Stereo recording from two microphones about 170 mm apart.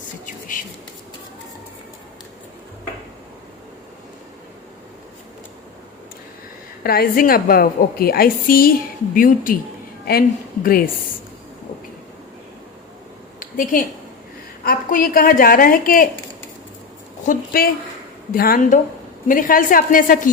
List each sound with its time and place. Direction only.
0.3 s a woman's voice: 50° left (ahead or behind)
6.8 s a woman's voice: 60° left (ahead or behind)
13.4 s a sound: 50° left (ahead or behind)
14.6 s a woman's voice: 55° left (ahead or behind)
17.2 s a woman's voice: 60° left (ahead or behind)